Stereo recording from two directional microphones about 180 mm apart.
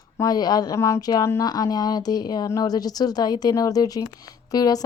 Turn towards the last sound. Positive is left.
turn(degrees=20)  # may be behind; listen again after turning